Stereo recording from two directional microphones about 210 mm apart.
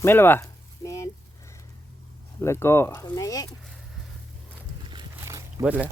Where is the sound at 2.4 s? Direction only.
10° left (ahead or behind).